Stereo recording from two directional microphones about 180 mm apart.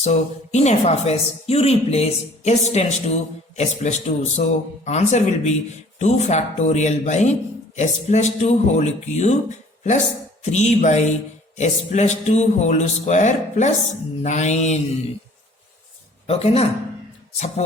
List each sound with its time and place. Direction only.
0.0 s speech: 40° left (ahead or behind)
10.4 s speech: 40° left (ahead or behind)
16.2 s speech: 35° left (ahead or behind)